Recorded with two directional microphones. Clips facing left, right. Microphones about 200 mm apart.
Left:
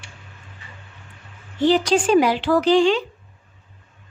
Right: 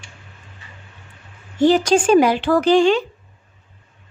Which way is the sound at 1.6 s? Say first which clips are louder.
Right 3 dB; 45° right (ahead or behind).